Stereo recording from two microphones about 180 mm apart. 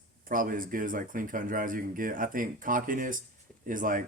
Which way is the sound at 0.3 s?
50° right (ahead or behind).